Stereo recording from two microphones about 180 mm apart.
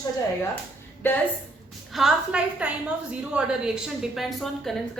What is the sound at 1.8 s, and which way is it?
A woman's voice, centre (ahead or behind).